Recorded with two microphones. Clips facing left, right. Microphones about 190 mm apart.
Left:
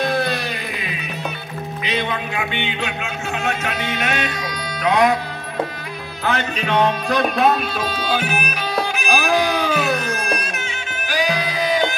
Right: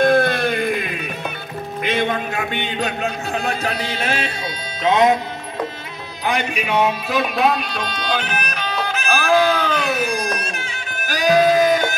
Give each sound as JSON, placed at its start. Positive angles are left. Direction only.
{"t": 0.0, "sound": "music", "side_deg": -50}
{"t": 1.8, "sound": "speech", "side_deg": -50}
{"t": 6.2, "sound": "music", "side_deg": -10}
{"t": 9.9, "sound": "music", "side_deg": -15}
{"t": 11.1, "sound": "music", "side_deg": -45}